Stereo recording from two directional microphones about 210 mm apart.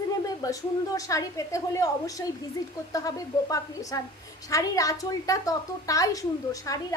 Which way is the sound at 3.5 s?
15° left (ahead or behind).